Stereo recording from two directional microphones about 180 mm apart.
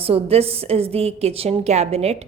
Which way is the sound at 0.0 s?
35° right (ahead or behind).